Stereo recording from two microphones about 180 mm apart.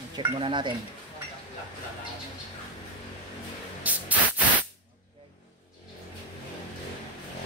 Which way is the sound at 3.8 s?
10° right (ahead or behind).